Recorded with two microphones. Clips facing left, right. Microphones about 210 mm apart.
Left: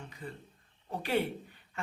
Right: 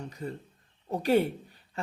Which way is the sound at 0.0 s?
40° right (ahead or behind).